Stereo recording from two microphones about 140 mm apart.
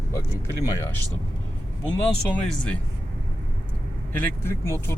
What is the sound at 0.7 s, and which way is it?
Speech, 20° left (ahead or behind).